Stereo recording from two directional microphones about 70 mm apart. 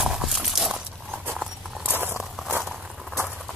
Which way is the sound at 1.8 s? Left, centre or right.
Right.